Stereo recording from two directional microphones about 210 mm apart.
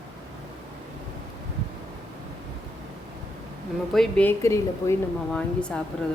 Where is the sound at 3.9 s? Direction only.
5° left (ahead or behind).